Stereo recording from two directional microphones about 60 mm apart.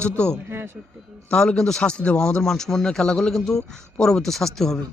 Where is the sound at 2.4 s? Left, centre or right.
Centre.